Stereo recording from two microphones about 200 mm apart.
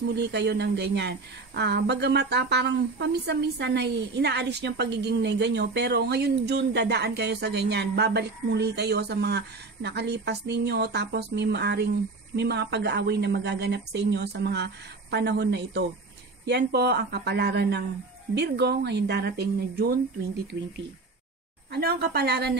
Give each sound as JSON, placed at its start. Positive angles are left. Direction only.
{"t": 0.1, "sound": "a woman's voice", "side_deg": -55}
{"t": 21.7, "sound": "a woman's voice", "side_deg": -50}